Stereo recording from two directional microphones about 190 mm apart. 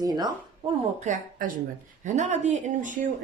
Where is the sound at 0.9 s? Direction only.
40° right (ahead or behind).